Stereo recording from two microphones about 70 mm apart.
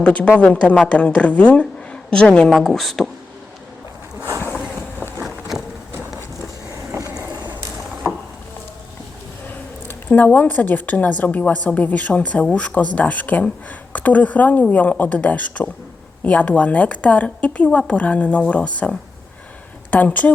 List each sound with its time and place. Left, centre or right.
0.0 s a woman's voice: centre
2.6 s speech: centre
9.8 s a woman's voice: left